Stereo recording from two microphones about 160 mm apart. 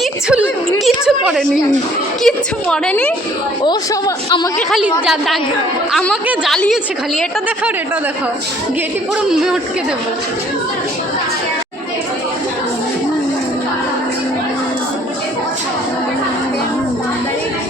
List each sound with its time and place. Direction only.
0.0 s a sound: 5° right (ahead or behind)
2.2 s a woman's voice: 5° left (ahead or behind)
3.6 s speech: 30° left (ahead or behind)
4.7 s a woman's voice: centre (ahead or behind)
6.2 s a woman's voice: 5° right (ahead or behind)
9.3 s a woman's voice: 5° right (ahead or behind)